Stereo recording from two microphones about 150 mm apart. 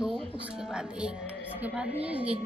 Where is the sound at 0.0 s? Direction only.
5° right (ahead or behind).